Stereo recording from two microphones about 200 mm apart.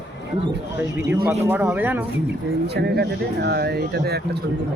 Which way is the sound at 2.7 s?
55° right (ahead or behind).